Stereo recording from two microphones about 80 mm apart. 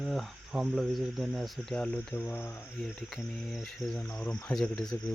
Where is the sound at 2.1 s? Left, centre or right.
Left.